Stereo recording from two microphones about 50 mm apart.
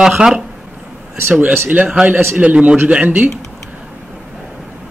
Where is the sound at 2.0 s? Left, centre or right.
Centre; by 3.3 s right.